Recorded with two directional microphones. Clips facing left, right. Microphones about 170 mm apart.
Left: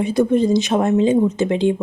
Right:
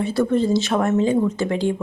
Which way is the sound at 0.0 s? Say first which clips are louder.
Left 3 dB; 15° left (ahead or behind).